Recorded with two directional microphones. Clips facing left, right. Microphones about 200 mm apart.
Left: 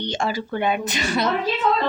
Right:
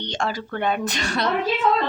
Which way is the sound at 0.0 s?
5° left (ahead or behind).